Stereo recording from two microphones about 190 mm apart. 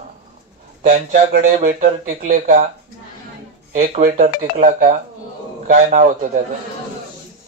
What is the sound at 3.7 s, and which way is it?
A man's voice, 40° right (ahead or behind).